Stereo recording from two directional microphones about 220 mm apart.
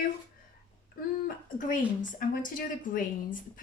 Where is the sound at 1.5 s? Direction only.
35° left (ahead or behind).